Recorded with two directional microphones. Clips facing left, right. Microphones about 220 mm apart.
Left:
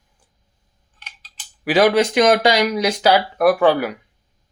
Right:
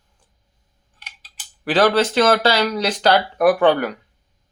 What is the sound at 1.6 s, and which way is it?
Speech, 10° left (ahead or behind).